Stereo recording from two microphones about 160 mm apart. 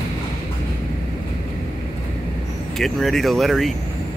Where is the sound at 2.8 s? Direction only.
Centre (ahead or behind).